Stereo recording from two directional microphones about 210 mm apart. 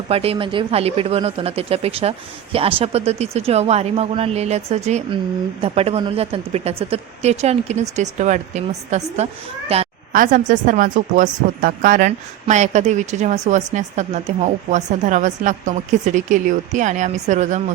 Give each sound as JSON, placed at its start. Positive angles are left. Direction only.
{"t": 0.1, "sound": "a woman's voice", "side_deg": -30}
{"t": 10.1, "sound": "a woman's voice", "side_deg": -40}